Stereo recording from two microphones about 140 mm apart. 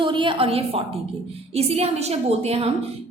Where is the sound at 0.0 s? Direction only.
35° right (ahead or behind).